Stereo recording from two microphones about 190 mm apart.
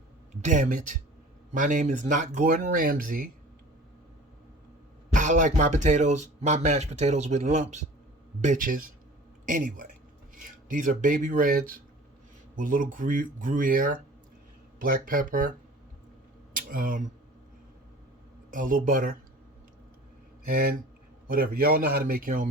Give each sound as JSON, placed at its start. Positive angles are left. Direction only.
{"t": 0.4, "sound": "speech", "side_deg": -40}
{"t": 5.1, "sound": "speech", "side_deg": -40}
{"t": 16.6, "sound": "speech", "side_deg": -45}
{"t": 18.5, "sound": "speech", "side_deg": -45}
{"t": 20.5, "sound": "speech", "side_deg": -55}